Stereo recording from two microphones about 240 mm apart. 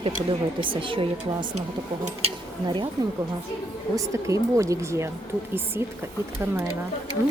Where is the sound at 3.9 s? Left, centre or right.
Centre.